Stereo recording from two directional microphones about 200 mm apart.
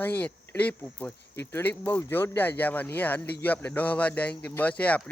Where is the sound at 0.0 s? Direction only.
10° left (ahead or behind).